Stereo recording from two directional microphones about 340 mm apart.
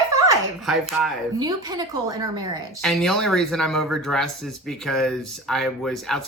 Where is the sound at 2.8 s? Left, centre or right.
Centre.